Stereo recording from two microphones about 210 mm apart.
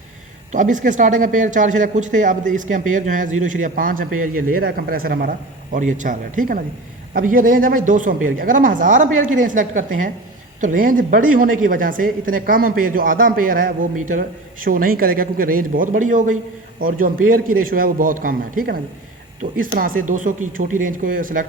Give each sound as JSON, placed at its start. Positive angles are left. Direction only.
{"t": 0.5, "sound": "a man's voice", "side_deg": -35}